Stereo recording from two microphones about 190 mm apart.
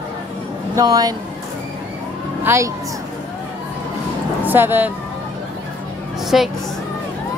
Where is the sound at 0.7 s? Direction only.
20° right (ahead or behind).